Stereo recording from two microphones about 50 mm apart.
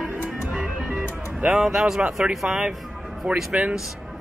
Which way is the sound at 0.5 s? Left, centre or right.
Centre.